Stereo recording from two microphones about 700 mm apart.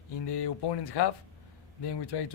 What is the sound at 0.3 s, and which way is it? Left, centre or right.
A man's voice, left.